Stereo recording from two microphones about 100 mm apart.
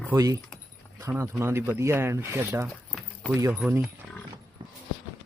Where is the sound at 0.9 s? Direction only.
20° right (ahead or behind).